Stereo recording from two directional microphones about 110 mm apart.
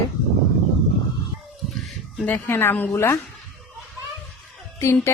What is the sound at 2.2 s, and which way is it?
Speech, 20° left (ahead or behind).